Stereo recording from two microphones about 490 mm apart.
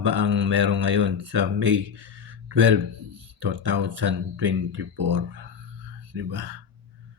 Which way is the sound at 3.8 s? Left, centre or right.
Right.